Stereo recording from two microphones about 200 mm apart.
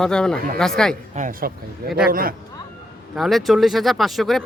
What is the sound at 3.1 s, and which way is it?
Speech, centre (ahead or behind).